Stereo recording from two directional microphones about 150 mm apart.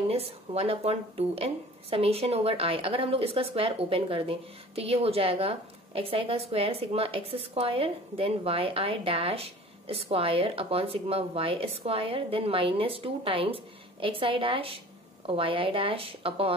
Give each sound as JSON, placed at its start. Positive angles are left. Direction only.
{"t": 0.1, "sound": "speech", "side_deg": -40}